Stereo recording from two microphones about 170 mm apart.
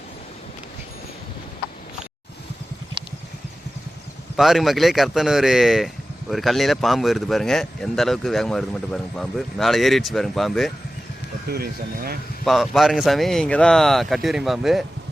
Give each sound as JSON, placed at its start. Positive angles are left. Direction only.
{"t": 4.4, "sound": "speech", "side_deg": 0}
{"t": 11.4, "sound": "speech", "side_deg": -65}
{"t": 12.5, "sound": "speech", "side_deg": 0}